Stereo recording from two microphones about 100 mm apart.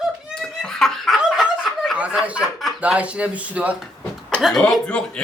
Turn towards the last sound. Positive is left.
turn(degrees=10)  # may be behind; listen again after turning